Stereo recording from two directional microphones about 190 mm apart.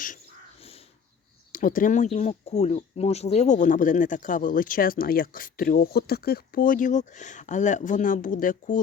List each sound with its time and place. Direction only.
0.6 s crow: 30° left (ahead or behind)
1.5 s speech: 45° left (ahead or behind)